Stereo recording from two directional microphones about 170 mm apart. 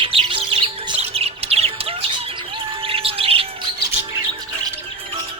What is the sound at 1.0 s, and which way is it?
Bird, 35° right (ahead or behind).